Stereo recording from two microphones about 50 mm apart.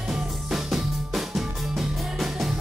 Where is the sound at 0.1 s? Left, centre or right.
Centre.